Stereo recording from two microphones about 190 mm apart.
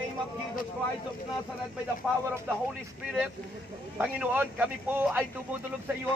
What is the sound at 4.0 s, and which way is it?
Speech, 5° right (ahead or behind).